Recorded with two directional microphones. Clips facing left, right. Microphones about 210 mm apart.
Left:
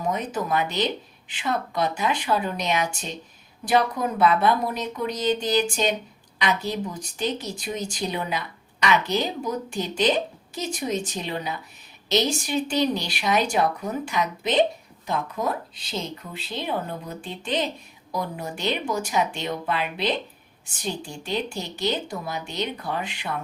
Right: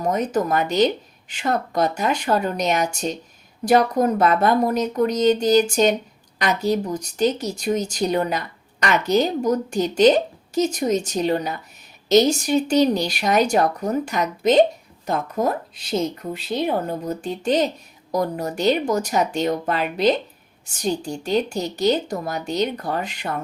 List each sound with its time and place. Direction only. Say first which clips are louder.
0.0 s a woman's voice: right 6 dB; 40° right (ahead or behind)